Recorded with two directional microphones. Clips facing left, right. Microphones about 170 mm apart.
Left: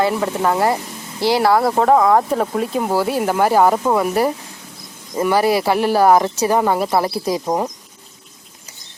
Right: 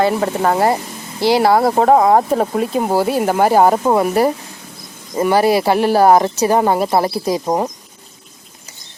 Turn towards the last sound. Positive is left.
turn(degrees=-20)  # may be behind; listen again after turning